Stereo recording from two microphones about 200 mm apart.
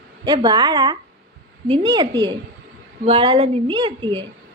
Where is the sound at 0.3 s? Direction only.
20° right (ahead or behind).